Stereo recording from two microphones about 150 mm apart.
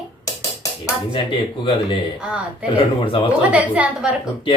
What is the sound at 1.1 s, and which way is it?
Speech, 35° left (ahead or behind).